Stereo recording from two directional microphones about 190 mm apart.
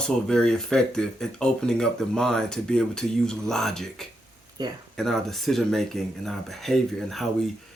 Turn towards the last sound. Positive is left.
turn(degrees=0)  # may be behind; listen again after turning